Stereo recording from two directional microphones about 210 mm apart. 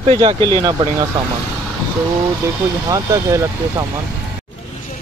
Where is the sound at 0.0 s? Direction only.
30° right (ahead or behind).